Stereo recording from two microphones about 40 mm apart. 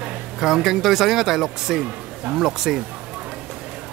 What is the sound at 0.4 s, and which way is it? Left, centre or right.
Speech, centre.